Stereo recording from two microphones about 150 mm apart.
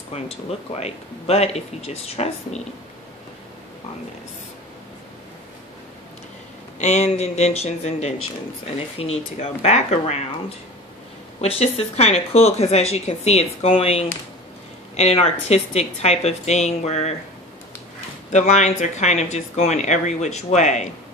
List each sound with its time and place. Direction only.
0.1 s speech: 45° left (ahead or behind)
6.8 s speech: 45° left (ahead or behind)
11.4 s speech: 40° left (ahead or behind)
18.3 s speech: 50° left (ahead or behind)